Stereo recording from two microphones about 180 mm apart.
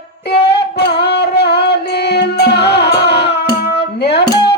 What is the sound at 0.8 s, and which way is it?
Music, 70° left (ahead or behind).